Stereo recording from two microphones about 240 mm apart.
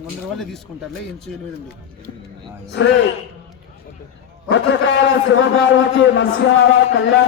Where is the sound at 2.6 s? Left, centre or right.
Left.